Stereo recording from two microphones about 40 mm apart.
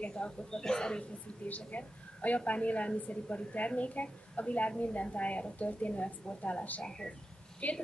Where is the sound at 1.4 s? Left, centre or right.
Left.